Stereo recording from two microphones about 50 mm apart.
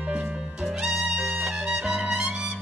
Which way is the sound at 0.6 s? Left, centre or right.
Centre.